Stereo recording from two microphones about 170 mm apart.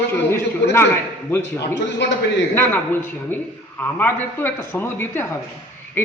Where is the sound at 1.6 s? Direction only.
90° left.